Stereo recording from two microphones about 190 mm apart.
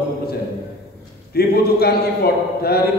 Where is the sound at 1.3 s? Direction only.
55° left (ahead or behind).